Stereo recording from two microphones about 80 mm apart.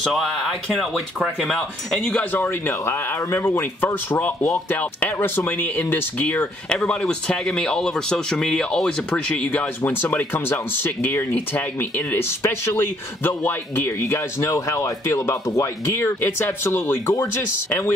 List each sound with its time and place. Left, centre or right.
0.0 s speech: centre
2.3 s speech: left
2.8 s speech: left
6.7 s speech: centre